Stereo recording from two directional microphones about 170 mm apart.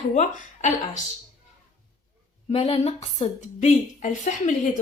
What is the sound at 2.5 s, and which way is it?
A woman's voice, 35° left (ahead or behind).